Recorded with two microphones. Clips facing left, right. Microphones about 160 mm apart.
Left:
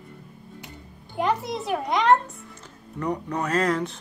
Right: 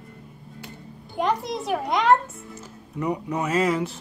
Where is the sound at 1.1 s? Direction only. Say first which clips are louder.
Even; centre (ahead or behind).